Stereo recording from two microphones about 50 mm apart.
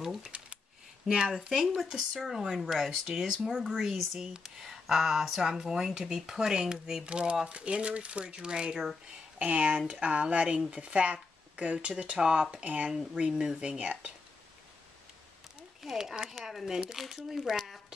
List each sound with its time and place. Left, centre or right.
0.0 s speech: centre
9.4 s speech: right
15.8 s speech: centre